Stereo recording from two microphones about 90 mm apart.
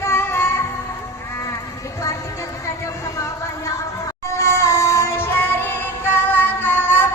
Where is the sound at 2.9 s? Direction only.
35° left (ahead or behind).